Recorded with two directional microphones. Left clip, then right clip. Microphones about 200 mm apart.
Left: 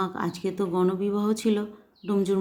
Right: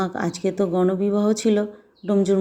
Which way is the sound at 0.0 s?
15° right (ahead or behind).